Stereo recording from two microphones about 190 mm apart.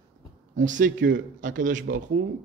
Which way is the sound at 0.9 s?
75° right (ahead or behind).